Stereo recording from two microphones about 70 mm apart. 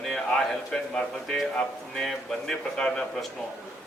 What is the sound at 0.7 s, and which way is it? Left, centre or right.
A man's voice, centre.